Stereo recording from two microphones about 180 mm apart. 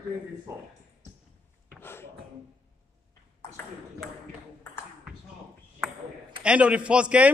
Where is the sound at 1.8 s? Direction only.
15° left (ahead or behind).